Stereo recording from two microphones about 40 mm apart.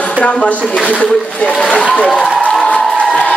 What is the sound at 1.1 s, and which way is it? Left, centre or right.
Speech, centre.